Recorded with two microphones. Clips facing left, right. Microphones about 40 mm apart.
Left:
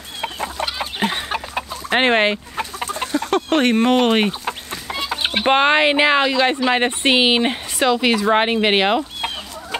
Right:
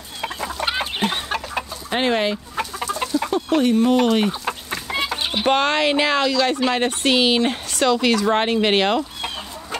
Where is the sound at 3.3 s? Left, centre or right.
Left.